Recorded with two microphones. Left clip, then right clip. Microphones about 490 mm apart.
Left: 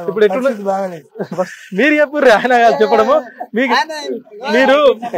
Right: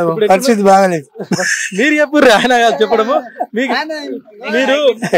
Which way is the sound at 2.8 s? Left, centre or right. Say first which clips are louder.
Left 1 dB; centre.